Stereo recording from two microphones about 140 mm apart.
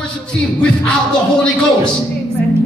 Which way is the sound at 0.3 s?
5° left (ahead or behind).